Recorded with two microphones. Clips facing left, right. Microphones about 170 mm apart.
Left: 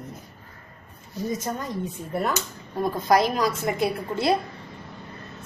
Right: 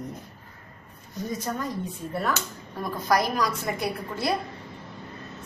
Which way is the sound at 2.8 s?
25° left (ahead or behind).